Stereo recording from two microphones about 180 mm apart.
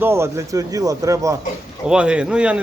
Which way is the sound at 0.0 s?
15° right (ahead or behind).